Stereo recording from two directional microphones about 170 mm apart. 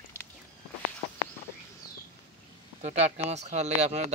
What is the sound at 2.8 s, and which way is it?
Speech, 40° right (ahead or behind).